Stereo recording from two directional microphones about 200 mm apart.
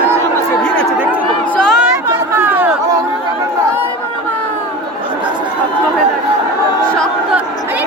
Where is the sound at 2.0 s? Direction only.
10° right (ahead or behind).